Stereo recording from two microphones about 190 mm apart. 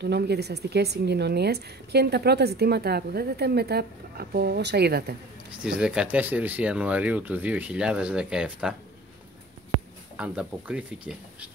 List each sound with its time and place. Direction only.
0.0 s a woman's voice: 60° right (ahead or behind)
5.6 s speech: 5° right (ahead or behind)
10.1 s speech: 5° right (ahead or behind)